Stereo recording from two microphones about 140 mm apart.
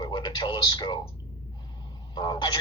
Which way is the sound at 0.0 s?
35° left (ahead or behind).